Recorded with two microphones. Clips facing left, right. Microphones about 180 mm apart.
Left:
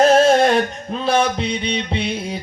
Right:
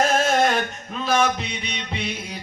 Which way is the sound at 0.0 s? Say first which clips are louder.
Left 7 dB; 30° left (ahead or behind).